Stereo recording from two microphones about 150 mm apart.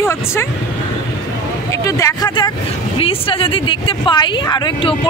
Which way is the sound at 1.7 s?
20° left (ahead or behind).